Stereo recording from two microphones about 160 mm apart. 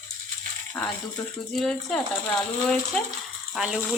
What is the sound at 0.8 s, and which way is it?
Speech, 5° left (ahead or behind).